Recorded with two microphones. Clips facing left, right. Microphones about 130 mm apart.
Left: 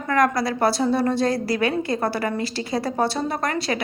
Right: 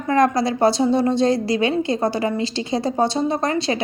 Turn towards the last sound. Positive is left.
turn(degrees=-25)  # may be behind; listen again after turning